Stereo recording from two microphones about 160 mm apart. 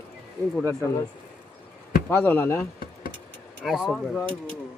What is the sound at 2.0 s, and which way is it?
Speech, 10° left (ahead or behind).